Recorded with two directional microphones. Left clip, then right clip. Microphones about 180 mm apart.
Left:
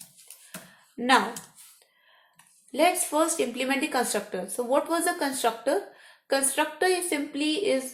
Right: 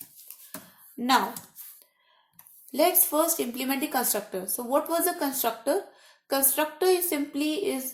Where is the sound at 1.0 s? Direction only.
40° right (ahead or behind).